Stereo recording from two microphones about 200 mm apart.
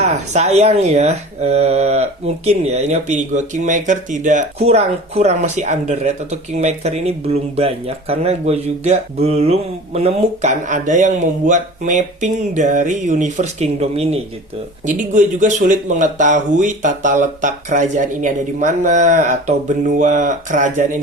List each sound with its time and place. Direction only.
0.0 s speech: 35° right (ahead or behind)